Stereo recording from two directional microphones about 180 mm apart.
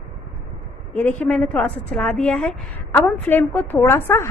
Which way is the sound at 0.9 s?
5° left (ahead or behind).